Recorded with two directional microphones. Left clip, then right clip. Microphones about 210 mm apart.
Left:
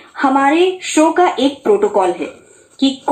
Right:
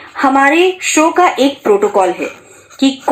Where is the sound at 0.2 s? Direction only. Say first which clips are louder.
Right 3 dB; 35° right (ahead or behind).